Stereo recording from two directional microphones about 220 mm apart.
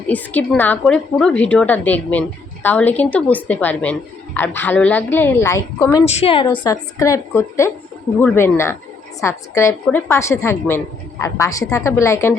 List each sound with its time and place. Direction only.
0.1 s a woman's voice: 5° left (ahead or behind)
6.1 s a woman's voice: 25° left (ahead or behind)